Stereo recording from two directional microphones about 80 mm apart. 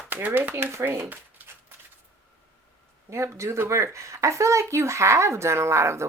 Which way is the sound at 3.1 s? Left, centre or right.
Right.